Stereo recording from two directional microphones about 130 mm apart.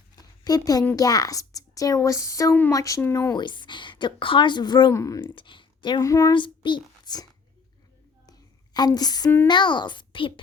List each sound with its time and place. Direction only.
0.2 s a sound: 30° left (ahead or behind)
0.9 s a woman's voice: 30° left (ahead or behind)
3.3 s a woman's voice: 35° left (ahead or behind)
5.2 s speech: 40° left (ahead or behind)
6.0 s a woman's voice: 25° left (ahead or behind)
6.3 s speech: 40° left (ahead or behind)
8.3 s a sound: 30° left (ahead or behind)
9.5 s a woman's voice: 35° left (ahead or behind)